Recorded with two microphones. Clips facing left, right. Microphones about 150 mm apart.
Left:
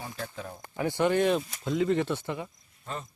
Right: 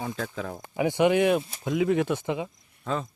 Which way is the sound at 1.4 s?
25° right (ahead or behind).